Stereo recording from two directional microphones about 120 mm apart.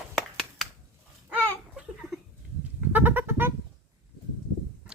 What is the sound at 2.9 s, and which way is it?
Goat, 15° right (ahead or behind).